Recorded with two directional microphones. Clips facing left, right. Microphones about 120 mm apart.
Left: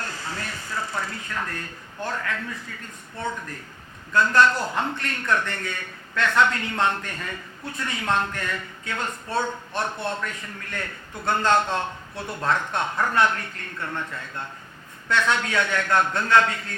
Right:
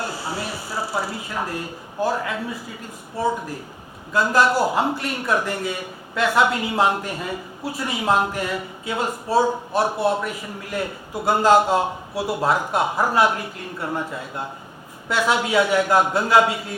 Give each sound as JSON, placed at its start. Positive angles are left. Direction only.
{"t": 0.0, "sound": "a man's voice", "side_deg": -10}